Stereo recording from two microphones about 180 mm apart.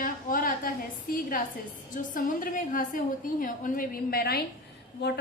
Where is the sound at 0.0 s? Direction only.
50° left (ahead or behind).